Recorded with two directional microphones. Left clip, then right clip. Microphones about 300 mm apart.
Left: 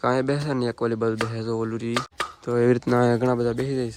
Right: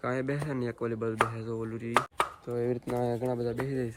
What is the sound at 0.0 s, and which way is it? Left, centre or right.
Speech, centre.